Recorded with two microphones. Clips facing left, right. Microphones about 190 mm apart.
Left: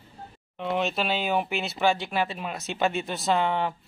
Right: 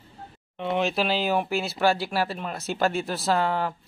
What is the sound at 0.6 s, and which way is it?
Speech, centre (ahead or behind).